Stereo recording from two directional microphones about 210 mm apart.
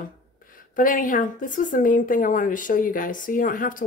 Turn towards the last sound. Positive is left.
turn(degrees=40)  # may be behind; listen again after turning